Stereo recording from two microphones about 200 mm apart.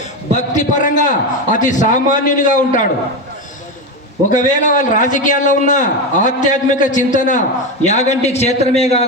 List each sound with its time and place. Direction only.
0.3 s a man's voice: 40° left (ahead or behind)
4.3 s a man's voice: 40° left (ahead or behind)